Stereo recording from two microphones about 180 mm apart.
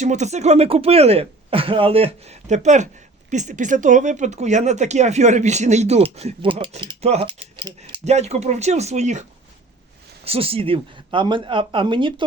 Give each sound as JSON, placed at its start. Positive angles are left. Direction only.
{"t": 0.0, "sound": "speech", "side_deg": -40}
{"t": 8.0, "sound": "speech", "side_deg": -40}
{"t": 10.2, "sound": "speech", "side_deg": -30}